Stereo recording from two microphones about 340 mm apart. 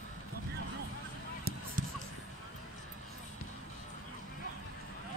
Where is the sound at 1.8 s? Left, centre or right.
Right.